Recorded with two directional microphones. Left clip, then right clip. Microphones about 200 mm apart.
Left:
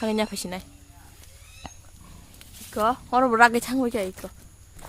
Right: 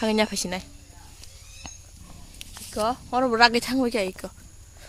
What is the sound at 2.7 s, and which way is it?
Speech, 35° left (ahead or behind).